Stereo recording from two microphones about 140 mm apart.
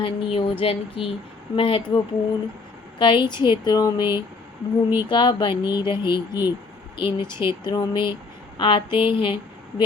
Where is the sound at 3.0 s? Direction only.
35° left (ahead or behind).